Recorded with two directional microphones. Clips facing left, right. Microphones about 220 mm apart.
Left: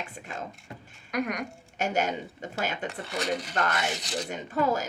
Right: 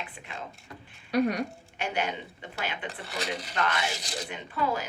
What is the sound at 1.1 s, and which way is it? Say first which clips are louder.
Speech: right 5 dB; 30° right (ahead or behind).